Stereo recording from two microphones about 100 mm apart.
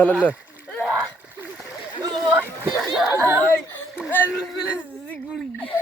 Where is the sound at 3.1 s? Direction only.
30° right (ahead or behind).